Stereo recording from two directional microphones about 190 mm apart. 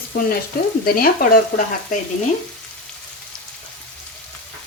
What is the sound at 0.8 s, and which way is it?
Speech, 50° left (ahead or behind).